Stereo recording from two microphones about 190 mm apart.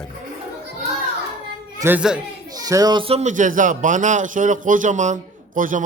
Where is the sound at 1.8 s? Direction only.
5° right (ahead or behind).